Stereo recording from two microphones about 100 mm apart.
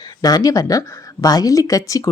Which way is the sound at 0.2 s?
40° left (ahead or behind).